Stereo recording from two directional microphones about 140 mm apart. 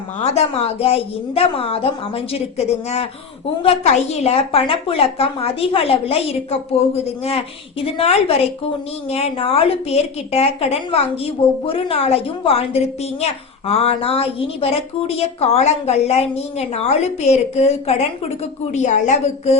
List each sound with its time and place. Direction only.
0.2 s a woman's voice: 50° left (ahead or behind)